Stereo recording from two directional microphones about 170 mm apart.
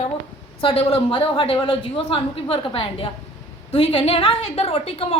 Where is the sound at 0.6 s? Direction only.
35° left (ahead or behind).